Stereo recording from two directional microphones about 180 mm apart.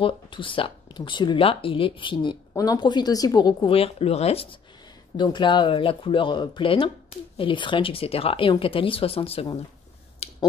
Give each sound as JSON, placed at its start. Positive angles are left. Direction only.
{"t": 0.0, "sound": "speech", "side_deg": 30}
{"t": 10.2, "sound": "finger snapping", "side_deg": 35}